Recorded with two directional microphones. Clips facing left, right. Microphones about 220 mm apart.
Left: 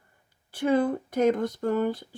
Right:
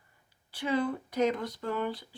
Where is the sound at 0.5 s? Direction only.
50° left (ahead or behind).